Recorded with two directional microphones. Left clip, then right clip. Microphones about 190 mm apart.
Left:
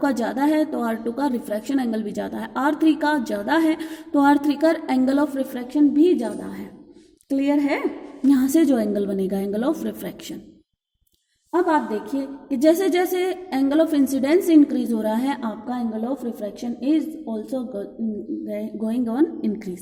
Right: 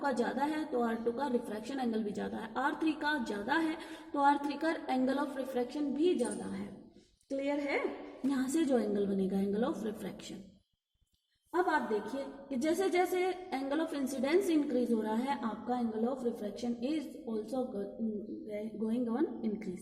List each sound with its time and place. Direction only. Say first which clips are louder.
0.0 s a woman's voice: left 11 dB; 45° left (ahead or behind)
7.3 s a woman's voice: left 13 dB; 45° left (ahead or behind)
11.5 s a woman's voice: left 11 dB; 45° left (ahead or behind)